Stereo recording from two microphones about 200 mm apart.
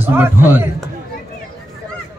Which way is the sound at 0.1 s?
10° right (ahead or behind).